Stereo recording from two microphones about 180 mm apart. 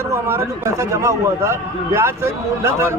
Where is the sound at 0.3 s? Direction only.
15° right (ahead or behind).